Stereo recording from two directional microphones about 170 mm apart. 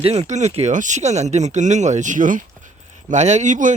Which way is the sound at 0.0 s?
40° right (ahead or behind).